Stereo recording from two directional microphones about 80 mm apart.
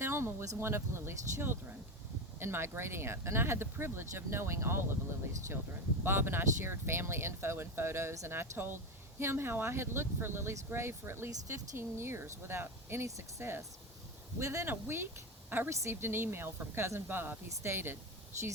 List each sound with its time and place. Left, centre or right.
0.0 s speech: right
6.0 s speech: right